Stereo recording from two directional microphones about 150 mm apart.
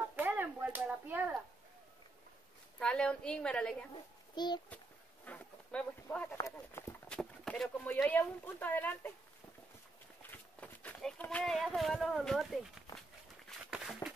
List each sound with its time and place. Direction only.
0.1 s a sound: 10° right (ahead or behind)
2.8 s a woman's voice: 5° left (ahead or behind)
4.4 s a child's voice: 30° left (ahead or behind)
5.2 s a woman's voice: 10° left (ahead or behind)
7.1 s a woman's voice: 5° left (ahead or behind)
10.3 s speech: 10° left (ahead or behind)
13.5 s a sound: 5° right (ahead or behind)